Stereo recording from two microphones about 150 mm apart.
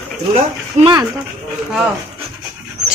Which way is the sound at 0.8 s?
30° right (ahead or behind).